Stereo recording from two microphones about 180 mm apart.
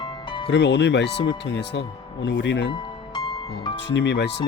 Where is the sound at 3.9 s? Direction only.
70° left (ahead or behind).